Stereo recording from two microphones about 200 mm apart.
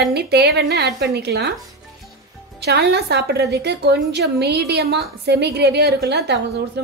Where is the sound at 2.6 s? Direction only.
55° right (ahead or behind).